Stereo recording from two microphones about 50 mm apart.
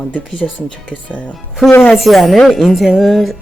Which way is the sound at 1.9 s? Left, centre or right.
Centre.